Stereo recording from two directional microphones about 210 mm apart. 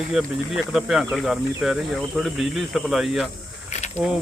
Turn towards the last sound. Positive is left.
turn(degrees=30)  # may be behind; listen again after turning